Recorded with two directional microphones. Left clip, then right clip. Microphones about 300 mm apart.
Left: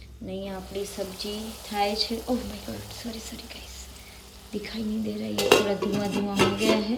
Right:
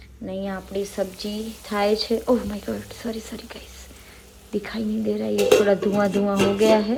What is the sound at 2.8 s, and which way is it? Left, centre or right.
Speech, centre.